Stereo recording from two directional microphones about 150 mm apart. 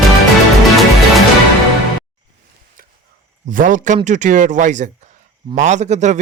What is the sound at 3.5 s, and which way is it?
A man's voice, 60° right (ahead or behind).